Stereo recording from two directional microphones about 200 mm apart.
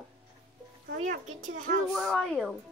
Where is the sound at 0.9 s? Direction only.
40° right (ahead or behind).